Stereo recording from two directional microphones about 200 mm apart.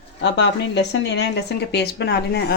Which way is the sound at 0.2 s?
60° left (ahead or behind).